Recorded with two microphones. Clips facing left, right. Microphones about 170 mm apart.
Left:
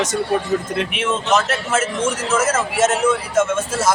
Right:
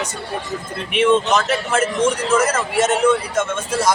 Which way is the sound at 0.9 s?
5° left (ahead or behind).